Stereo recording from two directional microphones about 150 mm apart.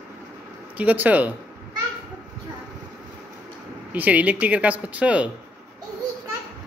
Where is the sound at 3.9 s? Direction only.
10° right (ahead or behind).